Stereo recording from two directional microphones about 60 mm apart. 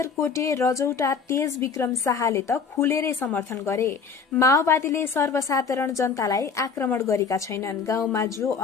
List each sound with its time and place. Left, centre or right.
0.3 s a woman's voice: left
3.5 s a woman's voice: left